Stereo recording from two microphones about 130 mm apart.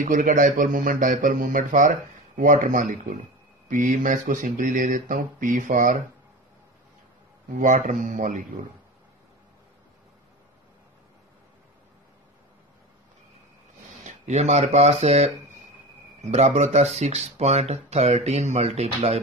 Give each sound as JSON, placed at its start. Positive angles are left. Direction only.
{"t": 0.0, "sound": "speech", "side_deg": -85}
{"t": 7.5, "sound": "speech", "side_deg": -80}
{"t": 14.0, "sound": "speech", "side_deg": -60}